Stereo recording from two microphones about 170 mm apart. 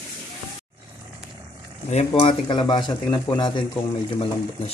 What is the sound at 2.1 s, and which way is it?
Speech, 30° left (ahead or behind).